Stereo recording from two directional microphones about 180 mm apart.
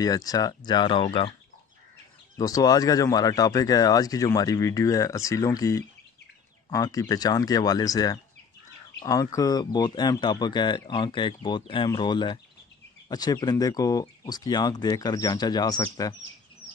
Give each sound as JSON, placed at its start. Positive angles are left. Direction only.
{"t": 0.0, "sound": "speech", "side_deg": 20}
{"t": 2.3, "sound": "speech", "side_deg": 20}